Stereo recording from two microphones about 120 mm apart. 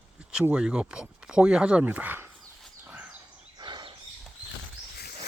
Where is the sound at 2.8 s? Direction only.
10° right (ahead or behind).